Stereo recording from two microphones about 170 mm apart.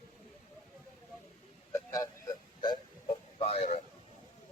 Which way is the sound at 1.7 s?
20° left (ahead or behind).